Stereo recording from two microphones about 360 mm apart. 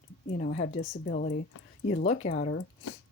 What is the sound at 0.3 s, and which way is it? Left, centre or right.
Speech, left.